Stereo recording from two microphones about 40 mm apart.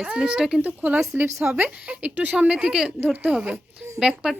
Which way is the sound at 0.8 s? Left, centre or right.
Right.